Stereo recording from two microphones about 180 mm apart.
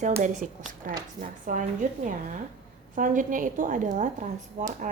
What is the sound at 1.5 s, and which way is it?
A woman's voice, 50° right (ahead or behind).